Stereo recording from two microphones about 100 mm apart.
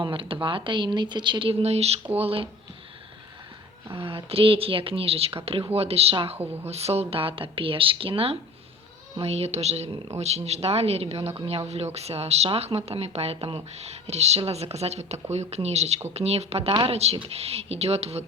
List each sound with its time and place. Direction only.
0.0 s speech: 60° right (ahead or behind); by 2.0 s 90° right
2.1 s speech: 70° right (ahead or behind)
3.9 s speech: 65° right (ahead or behind); by 6.1 s 85° right
6.3 s a woman's voice: 20° right (ahead or behind)
6.7 s speech: 90° right; by 8.4 s 70° right (ahead or behind)
9.1 s speech: 85° right